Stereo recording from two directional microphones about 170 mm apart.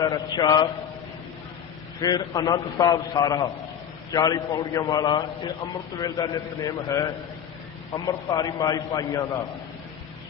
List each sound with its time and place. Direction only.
0.0 s a man's voice: 25° left (ahead or behind)
2.0 s a man's voice: 25° left (ahead or behind)